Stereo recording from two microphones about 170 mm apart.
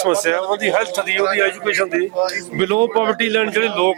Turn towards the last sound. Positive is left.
turn(degrees=-10)  # may be behind; listen again after turning